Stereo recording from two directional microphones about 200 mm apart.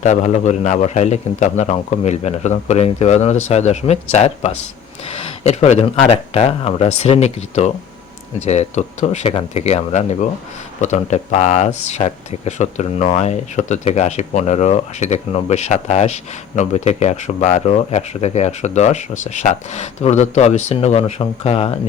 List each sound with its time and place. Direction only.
0.0 s speech: 35° left (ahead or behind)